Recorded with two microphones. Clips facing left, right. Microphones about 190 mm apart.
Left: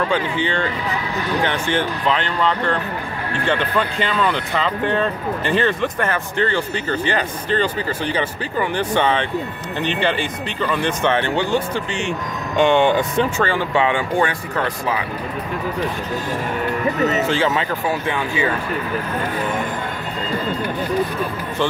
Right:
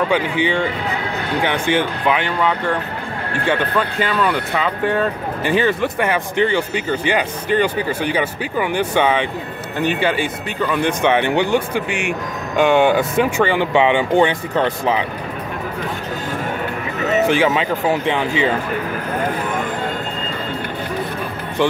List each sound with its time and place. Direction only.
0.1 s speech: 15° right (ahead or behind)
17.3 s speech: 15° right (ahead or behind)